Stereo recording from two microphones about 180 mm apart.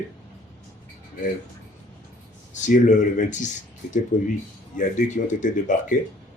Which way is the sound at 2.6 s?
45° left (ahead or behind).